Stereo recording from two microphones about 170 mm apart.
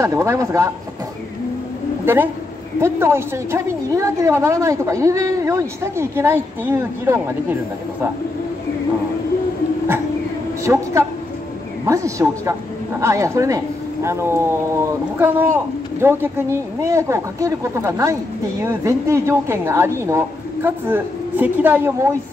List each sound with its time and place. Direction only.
0.0 s a woman's voice: 15° right (ahead or behind)
2.1 s a woman's voice: 15° right (ahead or behind)
10.6 s a woman's voice: 15° right (ahead or behind)